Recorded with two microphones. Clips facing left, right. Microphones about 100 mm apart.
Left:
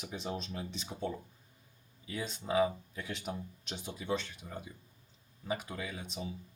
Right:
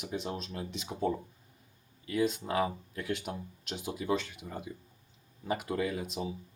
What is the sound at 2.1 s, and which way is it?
Speech, 5° right (ahead or behind).